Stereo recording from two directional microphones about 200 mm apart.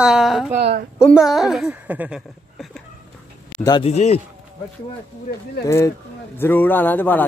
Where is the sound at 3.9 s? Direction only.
35° left (ahead or behind).